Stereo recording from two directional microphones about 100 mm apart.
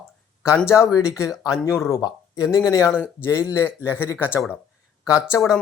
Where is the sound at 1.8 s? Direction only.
30° left (ahead or behind).